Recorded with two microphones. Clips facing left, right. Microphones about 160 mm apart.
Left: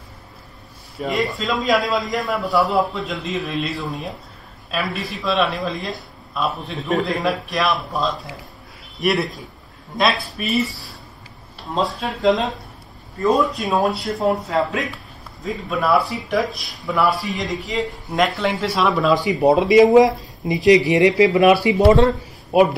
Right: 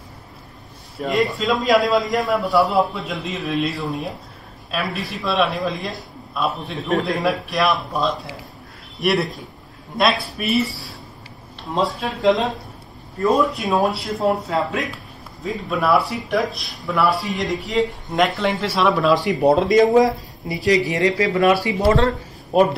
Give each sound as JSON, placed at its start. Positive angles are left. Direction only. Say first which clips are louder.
{"t": 1.0, "sound": "speech", "louder": "right 2 dB", "side_deg": 0}
{"t": 19.9, "sound": "speech", "louder": "left 3 dB", "side_deg": 20}
{"t": 22.5, "sound": "speech", "louder": "left 1 dB", "side_deg": 5}